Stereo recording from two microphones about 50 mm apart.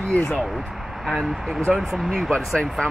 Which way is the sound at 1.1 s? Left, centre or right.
Centre.